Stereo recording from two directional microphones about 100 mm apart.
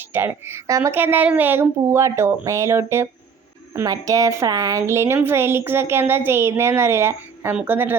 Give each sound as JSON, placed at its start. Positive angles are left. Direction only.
{"t": 0.0, "sound": "a woman's voice", "side_deg": -20}
{"t": 0.7, "sound": "speech", "side_deg": -30}
{"t": 0.9, "sound": "a woman's voice", "side_deg": -20}